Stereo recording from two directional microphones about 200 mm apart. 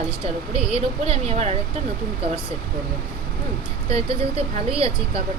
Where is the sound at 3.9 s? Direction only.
30° right (ahead or behind).